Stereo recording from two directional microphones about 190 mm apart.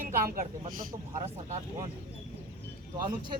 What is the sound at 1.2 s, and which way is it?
Speech, 35° right (ahead or behind).